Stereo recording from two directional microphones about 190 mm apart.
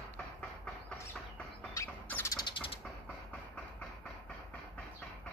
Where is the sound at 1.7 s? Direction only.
10° left (ahead or behind).